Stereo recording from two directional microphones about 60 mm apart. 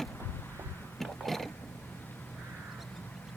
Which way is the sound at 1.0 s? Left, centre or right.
Centre.